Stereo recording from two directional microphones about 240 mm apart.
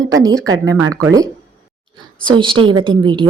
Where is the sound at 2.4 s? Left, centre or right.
Right.